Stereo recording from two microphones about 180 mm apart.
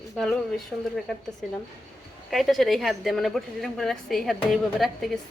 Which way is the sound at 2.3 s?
Centre (ahead or behind).